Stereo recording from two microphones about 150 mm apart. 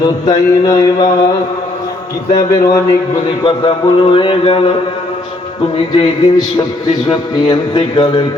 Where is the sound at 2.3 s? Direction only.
25° left (ahead or behind).